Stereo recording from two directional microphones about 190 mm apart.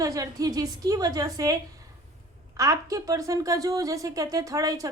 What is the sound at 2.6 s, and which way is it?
Speech, 15° right (ahead or behind).